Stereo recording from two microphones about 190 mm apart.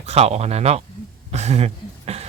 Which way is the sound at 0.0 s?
35° right (ahead or behind).